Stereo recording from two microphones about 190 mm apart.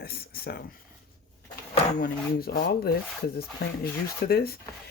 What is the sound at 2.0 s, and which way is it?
Speech, 55° left (ahead or behind).